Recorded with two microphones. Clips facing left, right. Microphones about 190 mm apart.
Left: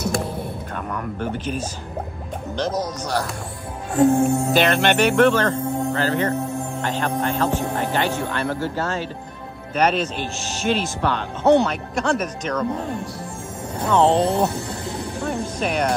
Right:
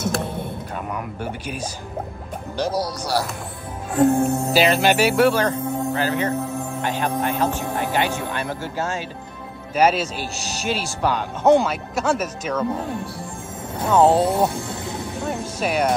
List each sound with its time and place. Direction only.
0.0 s music: centre (ahead or behind)
0.9 s speech: 10° right (ahead or behind)